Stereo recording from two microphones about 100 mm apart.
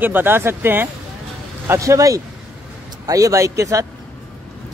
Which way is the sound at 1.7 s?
30° right (ahead or behind).